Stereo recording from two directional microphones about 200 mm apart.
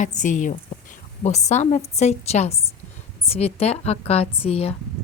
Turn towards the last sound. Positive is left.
turn(degrees=30)  # may be behind; listen again after turning